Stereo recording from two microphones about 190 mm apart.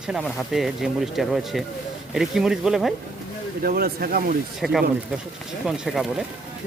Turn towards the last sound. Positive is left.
turn(degrees=0)  # may be behind; listen again after turning